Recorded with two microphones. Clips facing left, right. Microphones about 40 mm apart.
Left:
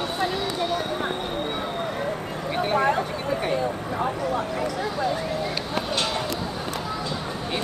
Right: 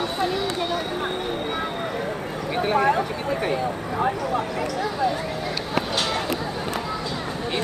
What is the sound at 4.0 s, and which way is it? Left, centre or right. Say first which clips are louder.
Speech: right 3 dB; centre.